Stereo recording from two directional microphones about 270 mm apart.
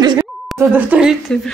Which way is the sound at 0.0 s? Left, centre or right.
Centre.